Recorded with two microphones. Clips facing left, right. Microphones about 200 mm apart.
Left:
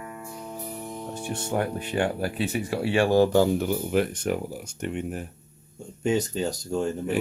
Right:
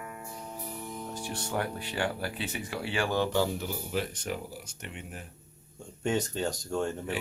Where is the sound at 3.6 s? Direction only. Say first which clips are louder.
Left 9 dB; 60° left (ahead or behind).